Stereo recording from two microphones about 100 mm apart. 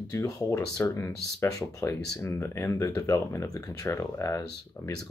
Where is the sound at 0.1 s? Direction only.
30° left (ahead or behind).